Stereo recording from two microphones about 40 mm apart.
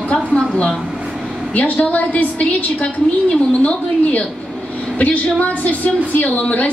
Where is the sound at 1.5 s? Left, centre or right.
Left.